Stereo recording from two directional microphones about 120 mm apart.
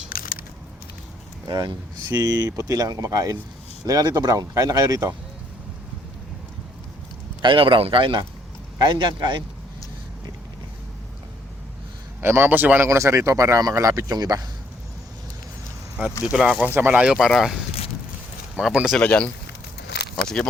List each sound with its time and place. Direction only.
1.5 s speech: 35° right (ahead or behind)
7.4 s a man's voice: 45° right (ahead or behind)
12.2 s speech: 20° right (ahead or behind)
16.2 s speech: 5° right (ahead or behind)
18.9 s speech: 10° left (ahead or behind)